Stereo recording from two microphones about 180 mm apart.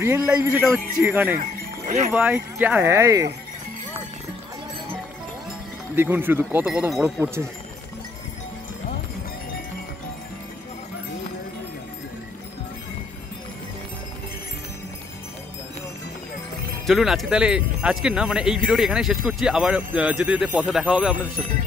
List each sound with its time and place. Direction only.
0.0 s speech: 15° right (ahead or behind)
1.9 s speech: 40° right (ahead or behind)
2.1 s speech: 10° right (ahead or behind)
5.9 s speech: 10° right (ahead or behind)
16.8 s speech: centre (ahead or behind)